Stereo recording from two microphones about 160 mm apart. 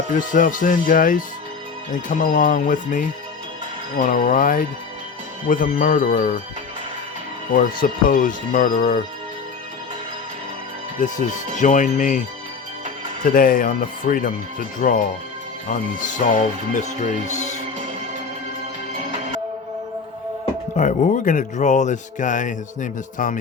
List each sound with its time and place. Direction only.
0.1 s speech: 55° left (ahead or behind)
7.5 s speech: 60° left (ahead or behind)
11.0 s speech: 50° left (ahead or behind)
13.2 s speech: 60° left (ahead or behind)
20.7 s speech: 55° left (ahead or behind)